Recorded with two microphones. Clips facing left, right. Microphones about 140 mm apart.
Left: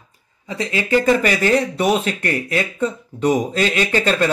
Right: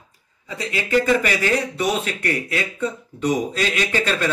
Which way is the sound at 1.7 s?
55° left (ahead or behind).